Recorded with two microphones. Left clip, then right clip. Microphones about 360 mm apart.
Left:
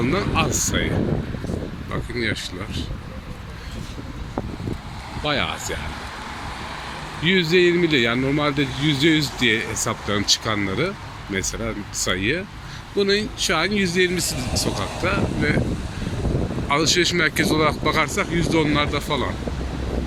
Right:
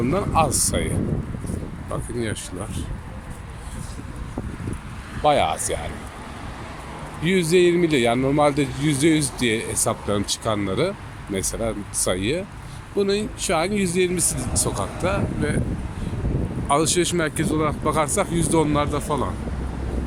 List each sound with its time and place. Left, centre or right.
0.1 s speech: centre
2.1 s speech: centre
5.2 s speech: centre
7.2 s speech: centre
16.6 s speech: centre